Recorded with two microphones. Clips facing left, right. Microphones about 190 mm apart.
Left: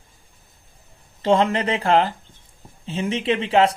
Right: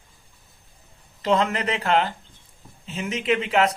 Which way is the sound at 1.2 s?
30° left (ahead or behind).